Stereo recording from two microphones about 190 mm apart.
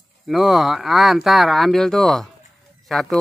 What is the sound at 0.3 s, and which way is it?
Speech, centre (ahead or behind).